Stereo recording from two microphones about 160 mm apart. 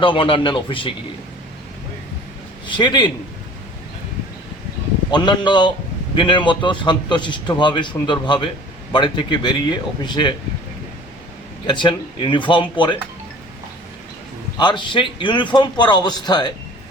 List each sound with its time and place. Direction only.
0.0 s speech: 30° left (ahead or behind)
2.6 s a man's voice: 30° left (ahead or behind)
5.1 s a man's voice: 30° left (ahead or behind)
11.6 s a man's voice: 30° left (ahead or behind)
14.6 s a man's voice: 30° left (ahead or behind)